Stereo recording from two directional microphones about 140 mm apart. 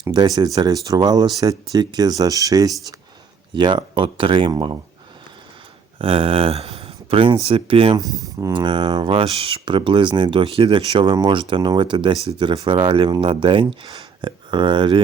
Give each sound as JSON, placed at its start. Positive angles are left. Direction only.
{"t": 0.0, "sound": "speech", "side_deg": -30}
{"t": 6.0, "sound": "speech", "side_deg": -40}
{"t": 7.9, "sound": "speech", "side_deg": -25}